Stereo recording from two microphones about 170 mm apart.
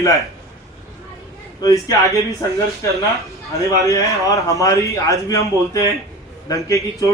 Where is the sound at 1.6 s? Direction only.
20° left (ahead or behind).